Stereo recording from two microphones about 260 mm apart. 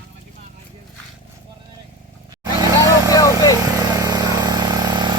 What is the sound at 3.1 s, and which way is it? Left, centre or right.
Vehicle, centre.